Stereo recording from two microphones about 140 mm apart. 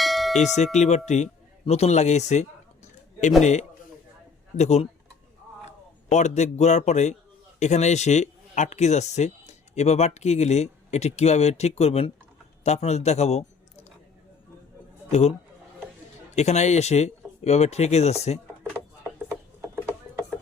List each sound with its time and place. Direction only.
0.0 s tubular bells: centre (ahead or behind)
0.5 s a man's voice: 55° left (ahead or behind)
6.1 s a man's voice: 55° left (ahead or behind)
16.3 s speech: 55° left (ahead or behind)